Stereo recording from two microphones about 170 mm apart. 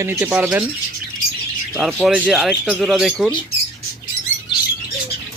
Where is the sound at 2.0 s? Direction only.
10° right (ahead or behind).